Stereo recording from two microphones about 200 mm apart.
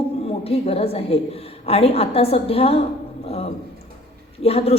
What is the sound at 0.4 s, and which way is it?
Speech, 30° left (ahead or behind).